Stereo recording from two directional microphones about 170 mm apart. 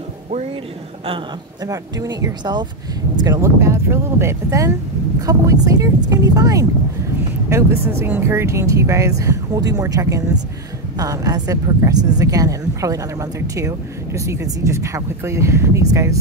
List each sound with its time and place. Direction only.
1.0 s a man's voice: 30° right (ahead or behind)
1.7 s a woman's voice: 20° right (ahead or behind)